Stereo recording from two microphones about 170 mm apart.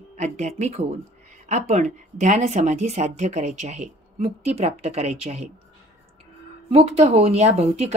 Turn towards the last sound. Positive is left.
turn(degrees=-40)  # may be behind; listen again after turning